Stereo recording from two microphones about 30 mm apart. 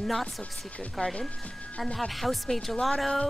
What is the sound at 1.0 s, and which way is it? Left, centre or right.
Speech, left.